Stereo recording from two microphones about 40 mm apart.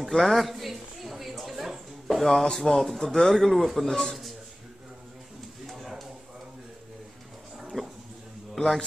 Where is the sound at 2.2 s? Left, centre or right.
Centre.